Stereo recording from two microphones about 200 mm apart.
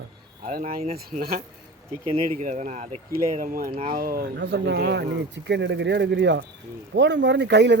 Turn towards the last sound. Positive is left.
turn(degrees=-60)  # may be behind; listen again after turning